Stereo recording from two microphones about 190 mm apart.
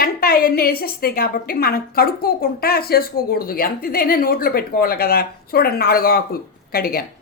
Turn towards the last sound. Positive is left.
turn(degrees=55)  # may be behind; listen again after turning